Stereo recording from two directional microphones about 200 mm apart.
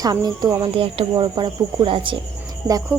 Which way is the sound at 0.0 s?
20° right (ahead or behind).